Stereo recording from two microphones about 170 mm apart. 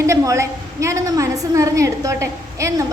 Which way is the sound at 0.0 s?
15° right (ahead or behind).